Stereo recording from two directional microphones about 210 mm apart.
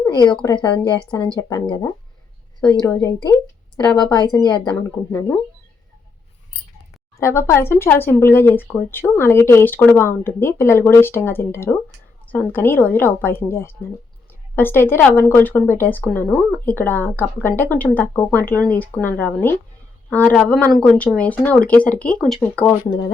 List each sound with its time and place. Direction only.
0.0 s speech: 20° left (ahead or behind)
2.8 s speech: 15° left (ahead or behind)
4.8 s speech: 10° left (ahead or behind)
7.2 s a woman's voice: 15° left (ahead or behind)